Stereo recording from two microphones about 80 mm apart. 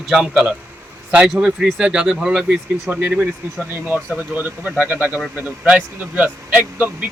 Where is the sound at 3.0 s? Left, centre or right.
Centre.